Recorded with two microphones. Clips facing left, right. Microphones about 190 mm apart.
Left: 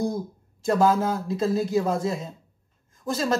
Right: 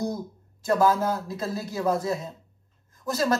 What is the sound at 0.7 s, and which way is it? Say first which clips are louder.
Speech: left 1 dB; 25° left (ahead or behind).